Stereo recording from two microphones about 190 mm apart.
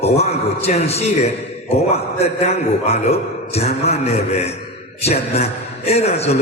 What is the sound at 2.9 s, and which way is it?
A man's voice, 35° left (ahead or behind).